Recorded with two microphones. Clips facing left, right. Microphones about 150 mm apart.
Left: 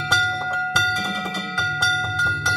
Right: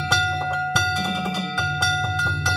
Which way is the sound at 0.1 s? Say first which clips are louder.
Right 1 dB; 5° right (ahead or behind).